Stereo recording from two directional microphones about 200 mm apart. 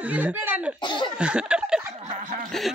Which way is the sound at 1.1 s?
5° right (ahead or behind).